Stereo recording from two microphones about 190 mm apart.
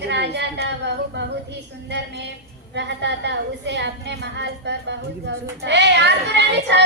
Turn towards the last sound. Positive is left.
turn(degrees=-65)  # may be behind; listen again after turning